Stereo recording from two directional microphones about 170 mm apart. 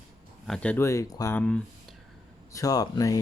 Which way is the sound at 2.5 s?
20° left (ahead or behind).